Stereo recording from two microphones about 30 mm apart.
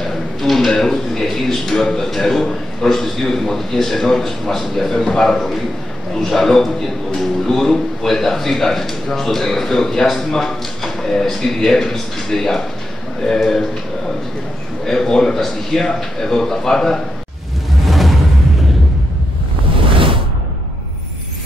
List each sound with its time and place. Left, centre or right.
0.4 s a man's voice: centre
14.9 s a man's voice: centre
17.8 s music: centre